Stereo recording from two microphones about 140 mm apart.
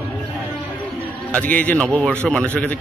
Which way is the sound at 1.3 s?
10° left (ahead or behind).